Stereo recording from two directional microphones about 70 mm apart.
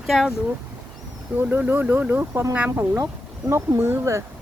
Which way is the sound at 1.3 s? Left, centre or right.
Right.